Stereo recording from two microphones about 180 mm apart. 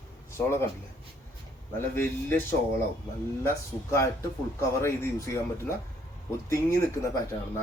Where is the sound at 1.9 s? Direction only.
10° left (ahead or behind).